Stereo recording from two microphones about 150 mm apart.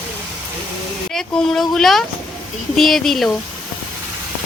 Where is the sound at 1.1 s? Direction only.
5° left (ahead or behind).